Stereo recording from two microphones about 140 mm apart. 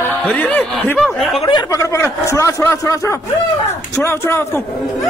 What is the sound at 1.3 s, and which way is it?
Speech, 35° left (ahead or behind).